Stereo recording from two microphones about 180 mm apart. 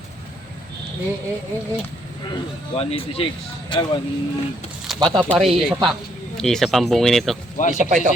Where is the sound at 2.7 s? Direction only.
30° left (ahead or behind).